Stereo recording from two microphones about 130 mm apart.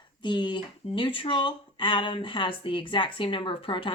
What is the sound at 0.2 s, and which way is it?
Speech, 35° left (ahead or behind).